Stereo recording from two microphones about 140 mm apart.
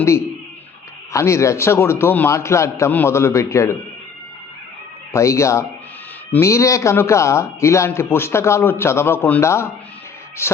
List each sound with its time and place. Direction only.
1.1 s a man's voice: 20° left (ahead or behind)
5.1 s a man's voice: 20° left (ahead or behind)